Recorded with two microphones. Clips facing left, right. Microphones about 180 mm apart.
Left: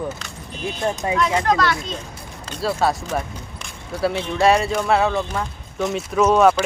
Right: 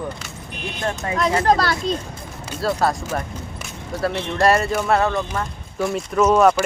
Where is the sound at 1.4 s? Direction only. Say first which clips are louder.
Right 2 dB; 35° right (ahead or behind).